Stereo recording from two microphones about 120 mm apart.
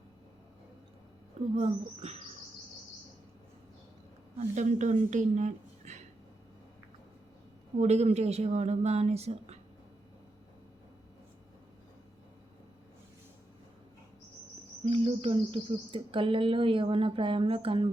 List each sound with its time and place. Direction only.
1.5 s speech: 60° right (ahead or behind)
4.4 s speech: 85° right
7.8 s speech: 65° right (ahead or behind)
14.8 s speech: 50° right (ahead or behind)